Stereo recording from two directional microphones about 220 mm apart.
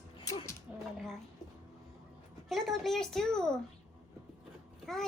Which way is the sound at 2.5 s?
Centre (ahead or behind).